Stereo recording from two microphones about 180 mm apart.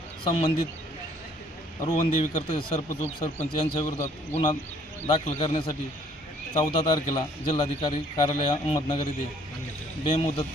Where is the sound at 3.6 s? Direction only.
35° left (ahead or behind).